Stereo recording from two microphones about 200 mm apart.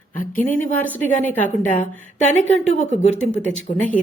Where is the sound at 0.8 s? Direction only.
10° left (ahead or behind).